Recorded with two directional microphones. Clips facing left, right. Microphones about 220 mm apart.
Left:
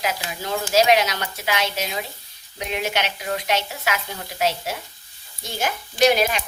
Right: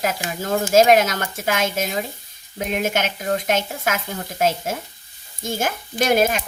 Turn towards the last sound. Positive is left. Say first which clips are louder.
# even
turn(degrees=-50)  # may be behind; listen again after turning